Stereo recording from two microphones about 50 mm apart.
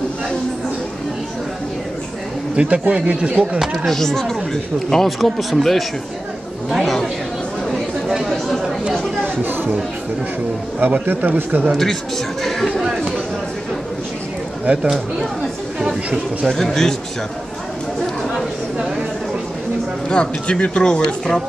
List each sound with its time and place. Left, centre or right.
2.5 s speech: right
3.5 s speech: centre
3.8 s speech: centre
8.3 s speech: centre
9.2 s speech: right
10.8 s a man's voice: right
11.7 s speech: centre
16.4 s speech: centre
20.1 s speech: centre